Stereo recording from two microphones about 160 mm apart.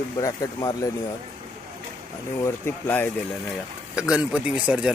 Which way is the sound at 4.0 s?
5° right (ahead or behind).